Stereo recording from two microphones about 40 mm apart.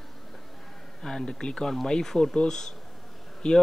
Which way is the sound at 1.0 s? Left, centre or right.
Centre.